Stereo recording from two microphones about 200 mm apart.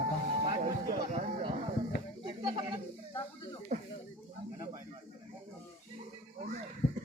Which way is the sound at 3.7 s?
35° right (ahead or behind).